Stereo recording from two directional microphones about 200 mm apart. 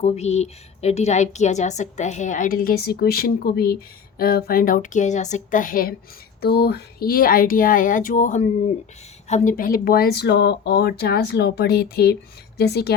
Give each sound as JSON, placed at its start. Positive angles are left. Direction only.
{"t": 0.0, "sound": "speech", "side_deg": 35}